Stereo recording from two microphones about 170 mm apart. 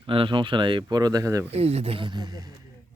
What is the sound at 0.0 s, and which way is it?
Speech, 30° right (ahead or behind).